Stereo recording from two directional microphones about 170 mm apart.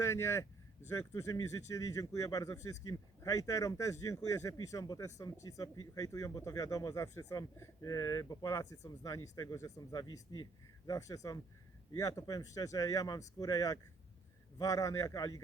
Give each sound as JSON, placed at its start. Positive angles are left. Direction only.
{"t": 0.0, "sound": "speech", "side_deg": 15}